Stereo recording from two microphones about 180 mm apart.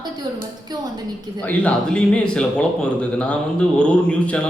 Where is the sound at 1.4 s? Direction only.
10° left (ahead or behind).